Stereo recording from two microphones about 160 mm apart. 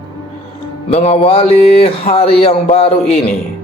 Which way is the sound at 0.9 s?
45° left (ahead or behind).